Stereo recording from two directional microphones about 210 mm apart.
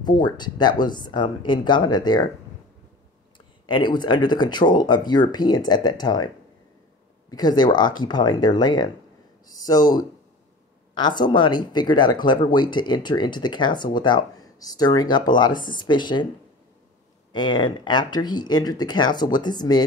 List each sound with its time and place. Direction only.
0.0 s speech: 20° left (ahead or behind)
3.3 s speech: 20° left (ahead or behind)
17.3 s speech: 20° left (ahead or behind)